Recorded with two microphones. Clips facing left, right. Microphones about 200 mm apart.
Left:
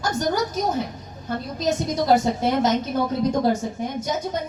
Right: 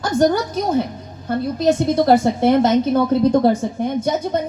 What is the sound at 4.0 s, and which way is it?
Speech, 60° right (ahead or behind).